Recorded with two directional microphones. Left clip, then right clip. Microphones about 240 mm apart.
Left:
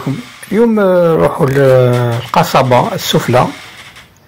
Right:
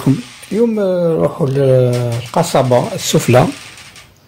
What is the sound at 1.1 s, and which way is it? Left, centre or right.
Speech, centre.